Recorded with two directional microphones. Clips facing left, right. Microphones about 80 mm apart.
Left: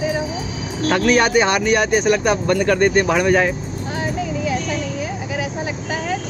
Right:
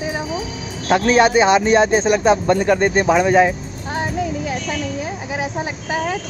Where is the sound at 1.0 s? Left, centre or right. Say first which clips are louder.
Right 2 dB; right.